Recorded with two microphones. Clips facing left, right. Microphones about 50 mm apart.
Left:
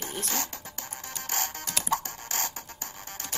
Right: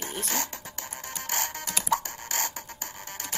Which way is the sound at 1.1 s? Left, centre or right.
Right.